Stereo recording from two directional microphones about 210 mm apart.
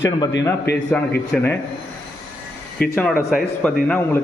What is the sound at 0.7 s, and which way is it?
Speech, 50° left (ahead or behind).